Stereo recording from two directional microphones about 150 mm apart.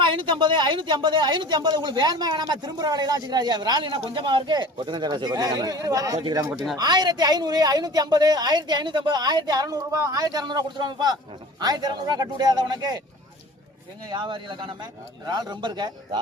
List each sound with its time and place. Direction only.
0.0 s speech: 35° right (ahead or behind)
14.1 s speech: 35° right (ahead or behind)